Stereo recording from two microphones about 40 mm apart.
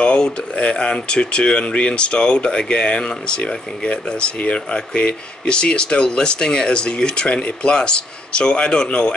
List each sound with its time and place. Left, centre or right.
0.6 s speech: left